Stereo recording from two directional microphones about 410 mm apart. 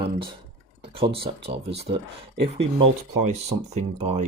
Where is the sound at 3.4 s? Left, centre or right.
Centre.